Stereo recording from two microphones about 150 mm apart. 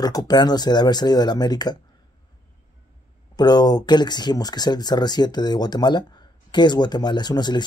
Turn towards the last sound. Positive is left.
turn(degrees=30)  # may be behind; listen again after turning